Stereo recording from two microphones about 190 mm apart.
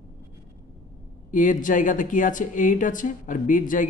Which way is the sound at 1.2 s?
45° left (ahead or behind).